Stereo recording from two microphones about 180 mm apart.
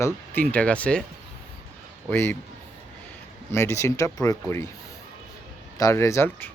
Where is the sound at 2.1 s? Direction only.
10° left (ahead or behind).